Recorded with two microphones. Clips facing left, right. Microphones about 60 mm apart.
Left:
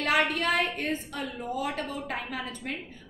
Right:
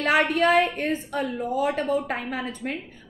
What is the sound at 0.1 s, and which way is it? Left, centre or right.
A woman's voice, right.